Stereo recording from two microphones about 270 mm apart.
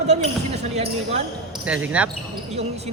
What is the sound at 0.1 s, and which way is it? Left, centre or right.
Speech, right.